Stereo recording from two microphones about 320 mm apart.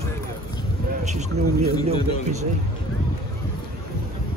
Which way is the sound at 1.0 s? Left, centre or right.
Right.